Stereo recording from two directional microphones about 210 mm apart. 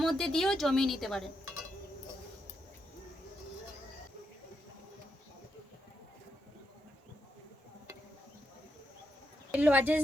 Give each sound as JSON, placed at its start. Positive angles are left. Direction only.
{"t": 0.0, "sound": "speech", "side_deg": 0}
{"t": 9.5, "sound": "a woman's voice", "side_deg": -5}